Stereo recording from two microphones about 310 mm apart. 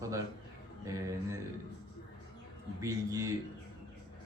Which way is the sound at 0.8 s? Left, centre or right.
Centre.